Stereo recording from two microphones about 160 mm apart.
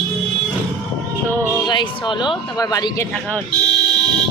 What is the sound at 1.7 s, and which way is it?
A man's voice, 30° left (ahead or behind).